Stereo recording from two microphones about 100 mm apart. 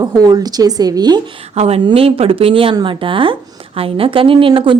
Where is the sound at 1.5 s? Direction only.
90° right.